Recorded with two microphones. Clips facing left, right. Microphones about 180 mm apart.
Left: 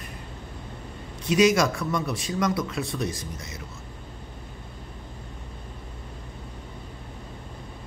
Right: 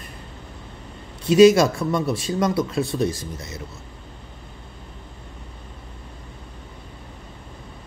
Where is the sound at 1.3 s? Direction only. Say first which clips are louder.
Right 7 dB; 30° right (ahead or behind).